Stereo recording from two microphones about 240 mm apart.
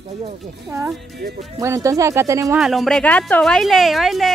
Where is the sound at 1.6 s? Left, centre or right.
Centre.